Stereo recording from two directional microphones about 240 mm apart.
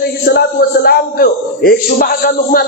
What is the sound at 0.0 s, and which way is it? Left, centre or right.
A man's voice, left.